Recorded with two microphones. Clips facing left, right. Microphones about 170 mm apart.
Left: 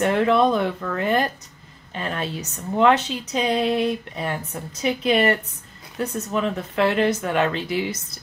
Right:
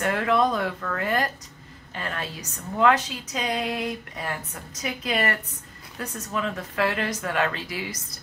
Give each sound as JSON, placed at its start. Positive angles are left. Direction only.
{"t": 0.0, "sound": "a woman's voice", "side_deg": 25}